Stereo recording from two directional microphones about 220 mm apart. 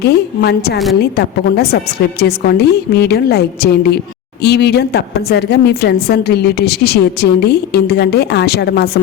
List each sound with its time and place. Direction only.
0.0 s a woman's voice: 45° left (ahead or behind)